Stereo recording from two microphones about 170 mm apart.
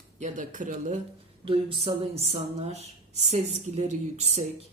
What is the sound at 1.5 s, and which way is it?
A man's voice, 35° right (ahead or behind).